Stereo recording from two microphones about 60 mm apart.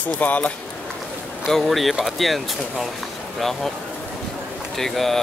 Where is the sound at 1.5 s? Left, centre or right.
Centre.